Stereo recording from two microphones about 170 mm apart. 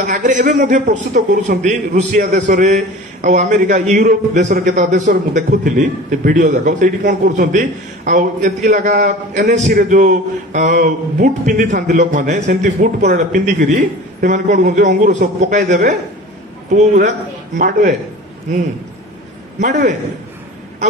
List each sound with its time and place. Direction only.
0.0 s a man's voice: 45° right (ahead or behind)
19.6 s a man's voice: 45° right (ahead or behind)